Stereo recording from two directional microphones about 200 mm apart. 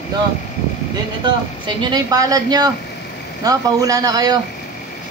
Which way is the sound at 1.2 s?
20° right (ahead or behind).